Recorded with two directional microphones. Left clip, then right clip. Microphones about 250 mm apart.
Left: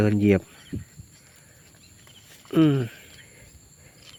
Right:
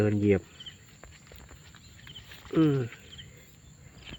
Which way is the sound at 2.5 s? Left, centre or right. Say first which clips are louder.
Left 4 dB; left.